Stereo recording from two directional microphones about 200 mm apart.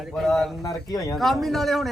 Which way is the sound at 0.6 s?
20° left (ahead or behind).